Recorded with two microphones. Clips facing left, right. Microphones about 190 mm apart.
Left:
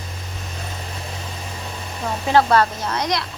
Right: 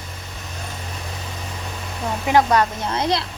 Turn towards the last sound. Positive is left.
turn(degrees=-25)  # may be behind; listen again after turning